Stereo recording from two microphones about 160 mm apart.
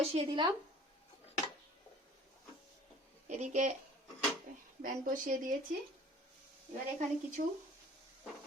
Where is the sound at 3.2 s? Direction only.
45° right (ahead or behind).